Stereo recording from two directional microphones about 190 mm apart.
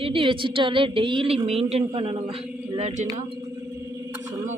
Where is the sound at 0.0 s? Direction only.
30° right (ahead or behind).